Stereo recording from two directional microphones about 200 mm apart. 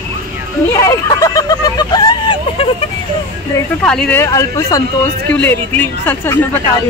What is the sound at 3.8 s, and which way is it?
Speech, 5° left (ahead or behind).